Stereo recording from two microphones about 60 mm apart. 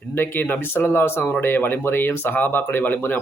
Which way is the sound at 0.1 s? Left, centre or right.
Left.